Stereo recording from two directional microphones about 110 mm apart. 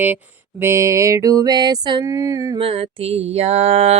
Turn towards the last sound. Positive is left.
turn(degrees=-75)  # may be behind; listen again after turning